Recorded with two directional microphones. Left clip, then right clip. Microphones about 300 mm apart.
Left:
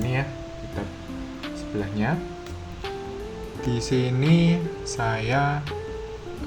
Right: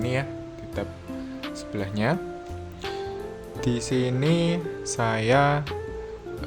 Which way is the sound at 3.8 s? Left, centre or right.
Right.